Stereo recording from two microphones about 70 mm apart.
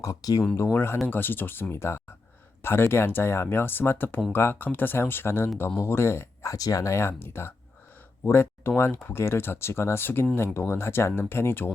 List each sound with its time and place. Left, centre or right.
0.0 s speech: left
0.5 s speech: left